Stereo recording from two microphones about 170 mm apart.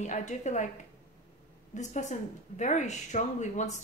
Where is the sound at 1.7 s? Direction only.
45° left (ahead or behind).